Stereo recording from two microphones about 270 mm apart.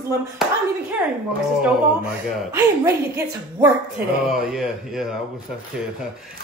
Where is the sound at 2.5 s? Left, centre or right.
Centre.